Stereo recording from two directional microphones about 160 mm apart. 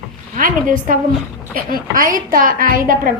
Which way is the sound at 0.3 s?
60° right (ahead or behind).